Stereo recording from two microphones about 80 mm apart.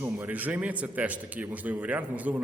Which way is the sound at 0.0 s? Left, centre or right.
Right.